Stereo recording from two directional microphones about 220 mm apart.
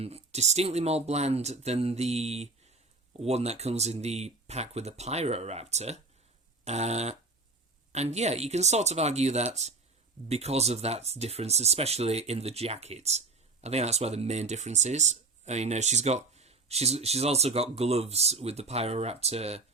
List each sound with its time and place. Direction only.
0.0 s speech: 30° right (ahead or behind)